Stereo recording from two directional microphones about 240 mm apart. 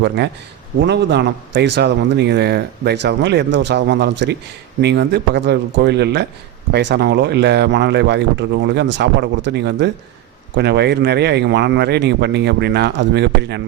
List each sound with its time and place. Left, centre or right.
0.8 s a man's voice: right